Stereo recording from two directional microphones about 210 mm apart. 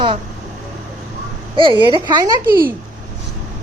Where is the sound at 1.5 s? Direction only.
25° right (ahead or behind).